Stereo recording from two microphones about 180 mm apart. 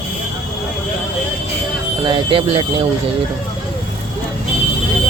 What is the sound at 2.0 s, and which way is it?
Speech, 30° right (ahead or behind).